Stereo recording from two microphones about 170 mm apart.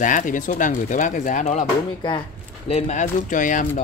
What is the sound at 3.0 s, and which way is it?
Speech, 50° left (ahead or behind).